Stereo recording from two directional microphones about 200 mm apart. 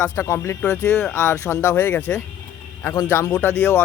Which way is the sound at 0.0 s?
15° left (ahead or behind).